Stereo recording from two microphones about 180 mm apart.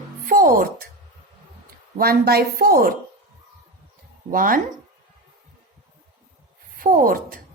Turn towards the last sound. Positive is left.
turn(degrees=-50)  # may be behind; listen again after turning